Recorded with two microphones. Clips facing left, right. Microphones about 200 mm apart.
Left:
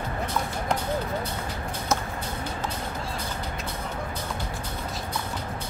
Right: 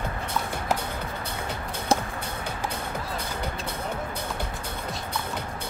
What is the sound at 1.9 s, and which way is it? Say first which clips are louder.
Music: right 3 dB; 30° right (ahead or behind).